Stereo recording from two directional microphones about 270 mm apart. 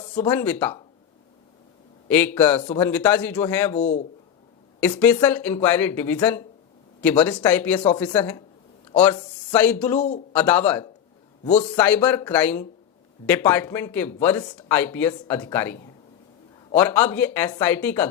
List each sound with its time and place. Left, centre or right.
0.1 s speech: centre
2.0 s speech: centre
3.8 s a man's voice: left
4.9 s speech: centre
11.4 s a man's voice: left
11.8 s speech: centre